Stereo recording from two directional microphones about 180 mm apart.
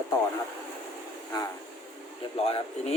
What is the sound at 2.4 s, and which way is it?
Speech, 35° left (ahead or behind).